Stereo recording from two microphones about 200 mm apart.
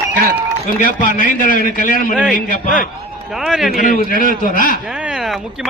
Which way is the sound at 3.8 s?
45° left (ahead or behind).